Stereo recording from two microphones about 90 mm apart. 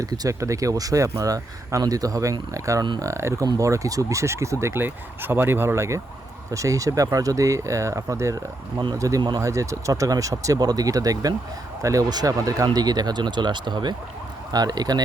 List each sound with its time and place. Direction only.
0.0 s speech: 40° right (ahead or behind)